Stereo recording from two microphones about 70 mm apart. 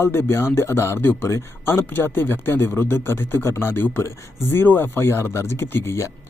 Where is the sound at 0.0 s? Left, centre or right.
Left.